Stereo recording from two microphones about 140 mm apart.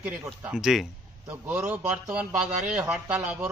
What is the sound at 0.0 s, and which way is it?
Speech, 5° right (ahead or behind).